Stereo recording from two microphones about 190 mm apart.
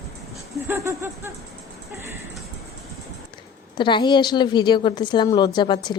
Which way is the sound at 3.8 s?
25° left (ahead or behind).